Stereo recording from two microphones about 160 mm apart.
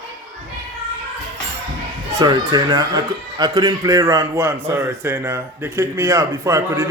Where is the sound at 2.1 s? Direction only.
25° right (ahead or behind).